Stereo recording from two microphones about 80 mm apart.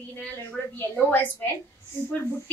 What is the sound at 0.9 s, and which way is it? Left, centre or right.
Speech, left.